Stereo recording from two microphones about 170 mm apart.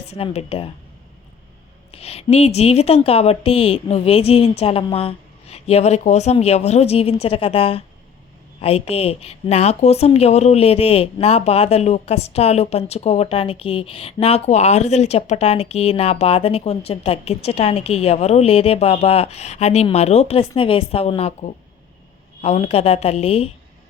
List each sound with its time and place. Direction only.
0.1 s a woman's voice: 35° left (ahead or behind)
1.9 s a woman's voice: 35° left (ahead or behind)